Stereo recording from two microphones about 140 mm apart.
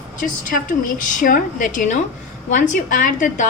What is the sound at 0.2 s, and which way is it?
A woman's voice, 75° left (ahead or behind).